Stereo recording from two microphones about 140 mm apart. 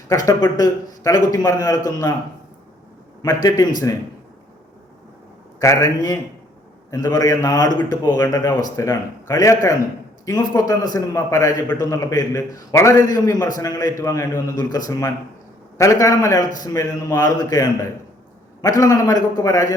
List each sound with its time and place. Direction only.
0.3 s a man's voice: 25° left (ahead or behind)
3.2 s a man's voice: 25° left (ahead or behind)
5.5 s a man's voice: 25° left (ahead or behind)
18.8 s a man's voice: 25° left (ahead or behind)